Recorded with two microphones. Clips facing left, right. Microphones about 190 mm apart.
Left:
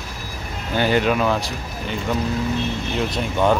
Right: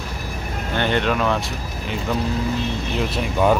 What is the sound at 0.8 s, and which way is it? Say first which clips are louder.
Speech: left 2 dB; 5° left (ahead or behind).